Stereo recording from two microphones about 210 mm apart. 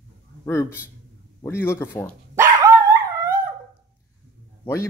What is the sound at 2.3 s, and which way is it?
Dog, 15° right (ahead or behind).